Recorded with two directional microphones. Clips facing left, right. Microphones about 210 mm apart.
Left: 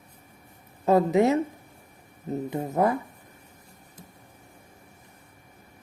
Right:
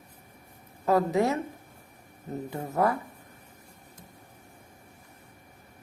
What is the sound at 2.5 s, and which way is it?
Speech, 20° left (ahead or behind).